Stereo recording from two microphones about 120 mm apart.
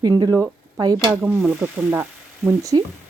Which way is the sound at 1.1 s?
15° right (ahead or behind).